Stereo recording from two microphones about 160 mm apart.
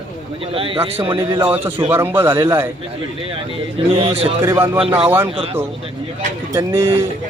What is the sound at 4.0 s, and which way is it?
Speech, 35° right (ahead or behind).